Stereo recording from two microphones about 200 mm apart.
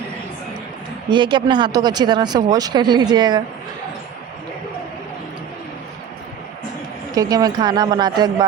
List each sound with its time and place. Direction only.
1.1 s speech: 20° right (ahead or behind)
7.2 s speech: 20° right (ahead or behind)